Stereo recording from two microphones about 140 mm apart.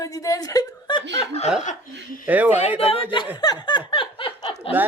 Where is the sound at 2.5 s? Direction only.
45° left (ahead or behind).